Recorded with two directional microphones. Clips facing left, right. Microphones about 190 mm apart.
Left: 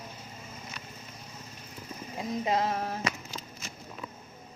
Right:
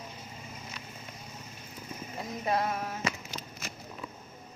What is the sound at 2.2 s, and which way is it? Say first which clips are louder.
Speech: left 2 dB; 20° left (ahead or behind).